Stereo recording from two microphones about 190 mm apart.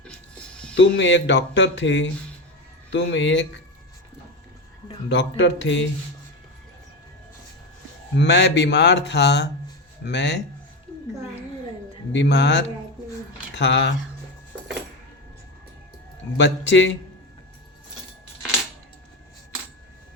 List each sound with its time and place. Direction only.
0.8 s speech: 70° left (ahead or behind)
5.0 s speech: 70° left (ahead or behind)
8.1 s speech: 70° left (ahead or behind)
12.1 s speech: 65° left (ahead or behind)
16.4 s speech: 70° left (ahead or behind)